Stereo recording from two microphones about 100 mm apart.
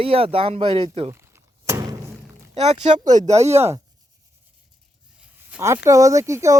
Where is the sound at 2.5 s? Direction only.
90° right.